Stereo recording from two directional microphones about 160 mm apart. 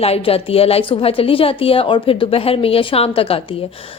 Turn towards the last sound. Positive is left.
turn(degrees=35)  # may be behind; listen again after turning